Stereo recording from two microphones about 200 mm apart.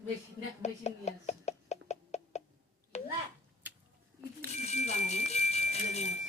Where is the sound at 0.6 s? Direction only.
35° left (ahead or behind).